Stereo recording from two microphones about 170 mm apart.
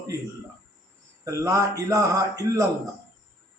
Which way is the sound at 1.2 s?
20° right (ahead or behind).